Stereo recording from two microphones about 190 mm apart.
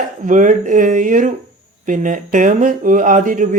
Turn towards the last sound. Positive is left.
turn(degrees=-45)  # may be behind; listen again after turning